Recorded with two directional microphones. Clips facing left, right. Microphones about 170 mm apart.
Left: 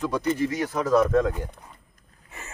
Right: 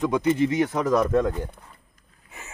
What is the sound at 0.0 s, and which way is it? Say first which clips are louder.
Speech: right 3 dB; 20° right (ahead or behind).